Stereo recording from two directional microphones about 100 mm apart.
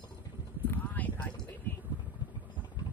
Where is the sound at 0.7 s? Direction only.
15° left (ahead or behind).